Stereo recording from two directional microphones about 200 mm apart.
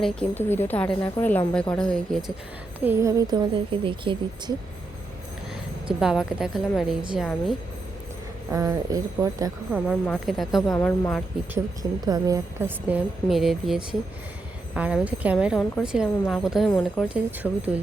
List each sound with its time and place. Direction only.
0.0 s speech: 5° left (ahead or behind)
2.8 s speech: 15° right (ahead or behind)
6.0 s speech: 5° right (ahead or behind)
8.5 s a woman's voice: 15° right (ahead or behind)
9.7 s speech: centre (ahead or behind)
10.7 s speech: 15° left (ahead or behind)
11.5 s a woman's voice: 20° right (ahead or behind); by 17.5 s 5° right (ahead or behind)